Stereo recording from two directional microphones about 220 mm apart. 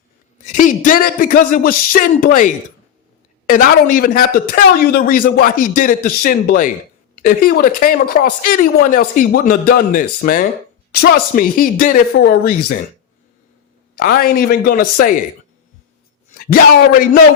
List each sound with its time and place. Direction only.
0.4 s a sound: 35° left (ahead or behind)
3.5 s speech: 40° left (ahead or behind)
13.9 s speech: 40° left (ahead or behind)
16.3 s a man's voice: 40° left (ahead or behind)